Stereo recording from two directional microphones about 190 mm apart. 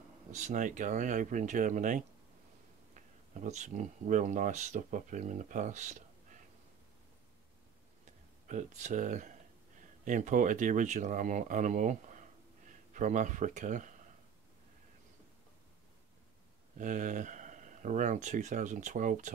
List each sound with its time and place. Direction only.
0.3 s speech: 40° right (ahead or behind)
3.3 s speech: 40° right (ahead or behind)
8.5 s speech: 40° right (ahead or behind)
16.7 s speech: 40° right (ahead or behind)